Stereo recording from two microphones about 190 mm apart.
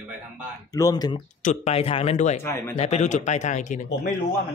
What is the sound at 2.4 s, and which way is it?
Speech, 15° left (ahead or behind).